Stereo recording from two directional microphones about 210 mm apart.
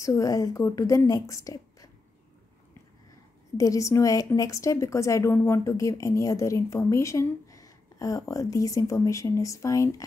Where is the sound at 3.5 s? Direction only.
15° left (ahead or behind).